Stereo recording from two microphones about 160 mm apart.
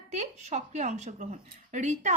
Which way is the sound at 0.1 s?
45° right (ahead or behind).